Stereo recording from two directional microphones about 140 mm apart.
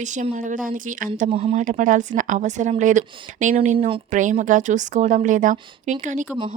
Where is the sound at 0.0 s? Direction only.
60° right (ahead or behind).